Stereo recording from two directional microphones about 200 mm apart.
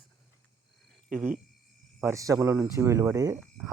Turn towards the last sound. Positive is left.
turn(degrees=-15)  # may be behind; listen again after turning